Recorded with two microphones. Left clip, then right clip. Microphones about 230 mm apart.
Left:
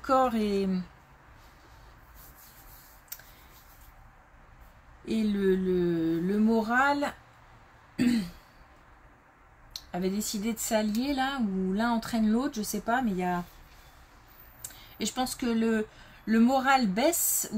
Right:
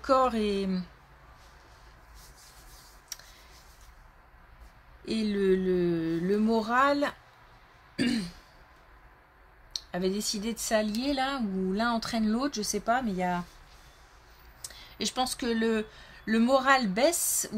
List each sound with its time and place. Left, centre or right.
0.0 s speech: right
5.0 s speech: right
9.7 s speech: right
14.8 s speech: right